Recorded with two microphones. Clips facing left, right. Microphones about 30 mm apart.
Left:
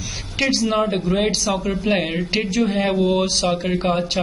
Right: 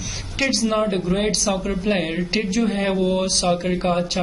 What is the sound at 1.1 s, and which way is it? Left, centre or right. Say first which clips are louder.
A man's voice: left 1 dB; centre.